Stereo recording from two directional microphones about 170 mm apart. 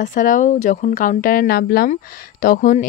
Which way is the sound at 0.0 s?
50° left (ahead or behind).